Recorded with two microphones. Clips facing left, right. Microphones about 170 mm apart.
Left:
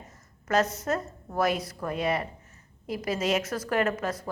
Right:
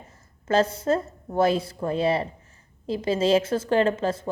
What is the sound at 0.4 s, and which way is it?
A woman's voice, 30° right (ahead or behind).